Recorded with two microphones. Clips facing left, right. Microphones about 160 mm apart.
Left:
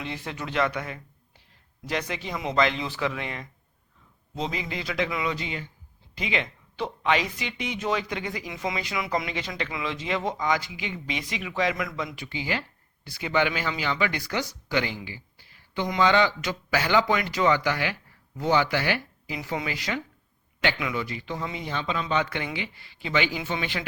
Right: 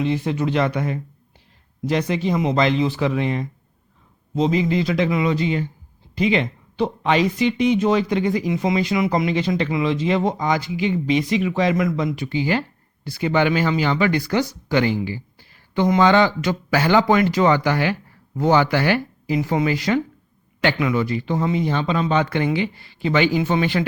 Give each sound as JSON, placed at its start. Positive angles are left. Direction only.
{"t": 0.0, "sound": "speech", "side_deg": -20}